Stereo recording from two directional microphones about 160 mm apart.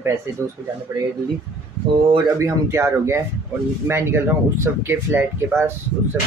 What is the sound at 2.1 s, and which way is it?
Speech, 20° right (ahead or behind).